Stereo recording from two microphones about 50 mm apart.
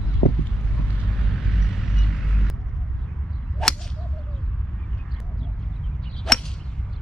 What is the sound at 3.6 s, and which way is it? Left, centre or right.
Whip, centre.